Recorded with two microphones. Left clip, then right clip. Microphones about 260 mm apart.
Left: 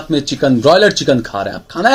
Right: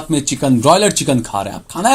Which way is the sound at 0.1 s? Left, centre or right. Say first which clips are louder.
Left 2 dB; right.